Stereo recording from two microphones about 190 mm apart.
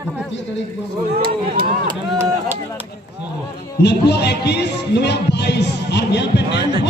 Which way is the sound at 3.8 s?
60° left (ahead or behind).